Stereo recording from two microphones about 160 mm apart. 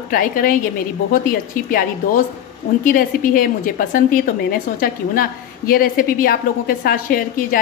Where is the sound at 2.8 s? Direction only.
60° left (ahead or behind).